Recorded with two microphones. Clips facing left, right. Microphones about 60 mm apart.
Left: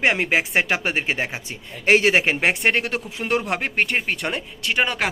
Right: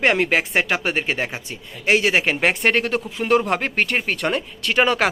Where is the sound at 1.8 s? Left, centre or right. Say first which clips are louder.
Left 1 dB; left.